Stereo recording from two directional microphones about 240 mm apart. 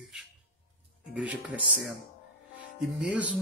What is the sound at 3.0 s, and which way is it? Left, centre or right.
Speech, centre.